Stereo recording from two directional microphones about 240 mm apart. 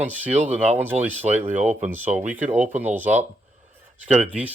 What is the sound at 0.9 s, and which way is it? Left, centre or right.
Speech, right.